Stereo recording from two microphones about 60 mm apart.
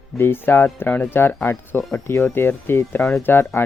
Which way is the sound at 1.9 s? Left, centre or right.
Left.